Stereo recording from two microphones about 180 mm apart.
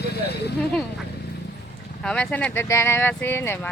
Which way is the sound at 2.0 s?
5° left (ahead or behind).